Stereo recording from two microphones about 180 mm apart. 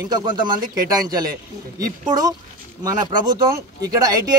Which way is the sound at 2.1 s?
20° right (ahead or behind).